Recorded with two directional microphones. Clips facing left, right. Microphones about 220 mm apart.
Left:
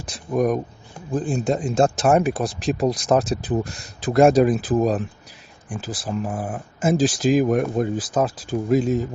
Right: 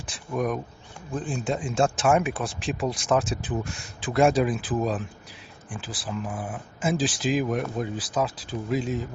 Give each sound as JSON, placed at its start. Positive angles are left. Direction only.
{"t": 0.0, "sound": "speech", "side_deg": 40}